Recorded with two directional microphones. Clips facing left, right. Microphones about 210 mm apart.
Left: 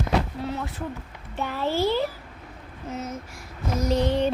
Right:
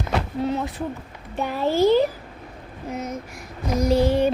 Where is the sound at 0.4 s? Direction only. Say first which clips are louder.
Right 6 dB; 20° right (ahead or behind).